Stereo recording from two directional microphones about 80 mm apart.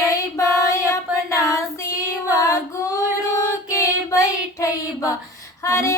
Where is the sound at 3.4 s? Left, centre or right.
Left.